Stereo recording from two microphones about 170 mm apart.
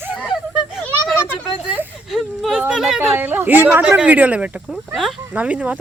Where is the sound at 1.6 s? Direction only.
5° right (ahead or behind).